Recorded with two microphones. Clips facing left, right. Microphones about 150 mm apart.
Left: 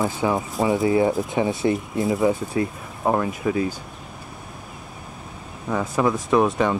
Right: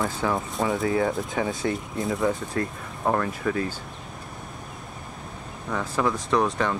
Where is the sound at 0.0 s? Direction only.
5° left (ahead or behind).